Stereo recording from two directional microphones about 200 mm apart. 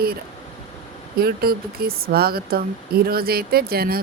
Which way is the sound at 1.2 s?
50° right (ahead or behind).